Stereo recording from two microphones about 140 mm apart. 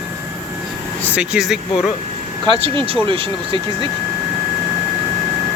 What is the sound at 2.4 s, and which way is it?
Speech, 35° right (ahead or behind).